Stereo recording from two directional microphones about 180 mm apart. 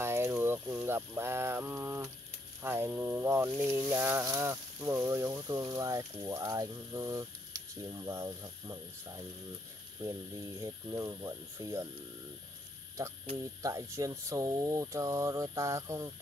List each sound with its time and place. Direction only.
0.0 s a sound: 15° right (ahead or behind)
0.3 s speech: 10° right (ahead or behind)
10.6 s speech: 15° right (ahead or behind)
13.6 s speech: 15° right (ahead or behind)